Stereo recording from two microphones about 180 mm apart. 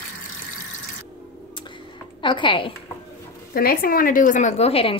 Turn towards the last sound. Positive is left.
turn(degrees=35)  # may be behind; listen again after turning